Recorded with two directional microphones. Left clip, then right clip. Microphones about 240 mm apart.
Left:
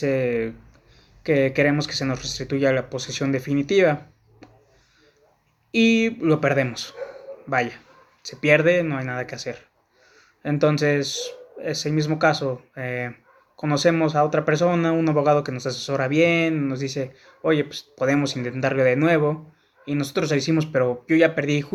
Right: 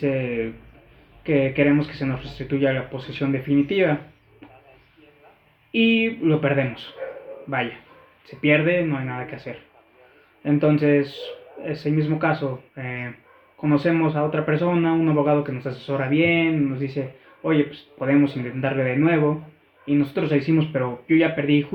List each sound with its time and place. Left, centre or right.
0.0 s speech: centre
5.7 s speech: left
8.3 s speech: centre
18.0 s speech: left